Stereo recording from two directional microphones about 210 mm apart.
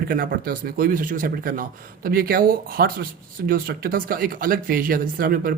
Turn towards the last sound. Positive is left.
turn(degrees=-45)  # may be behind; listen again after turning